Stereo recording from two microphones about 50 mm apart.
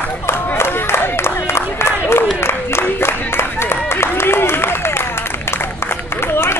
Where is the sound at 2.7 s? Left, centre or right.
Left.